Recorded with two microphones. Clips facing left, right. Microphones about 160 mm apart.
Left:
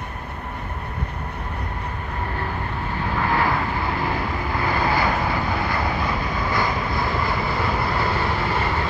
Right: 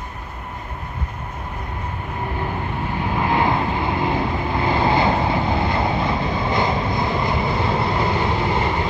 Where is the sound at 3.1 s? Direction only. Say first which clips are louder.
Right 2 dB; 20° right (ahead or behind).